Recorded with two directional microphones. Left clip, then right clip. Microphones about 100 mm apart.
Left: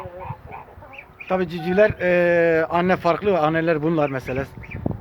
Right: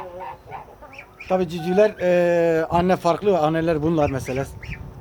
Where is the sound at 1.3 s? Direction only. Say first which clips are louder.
Right 1 dB; 10° right (ahead or behind).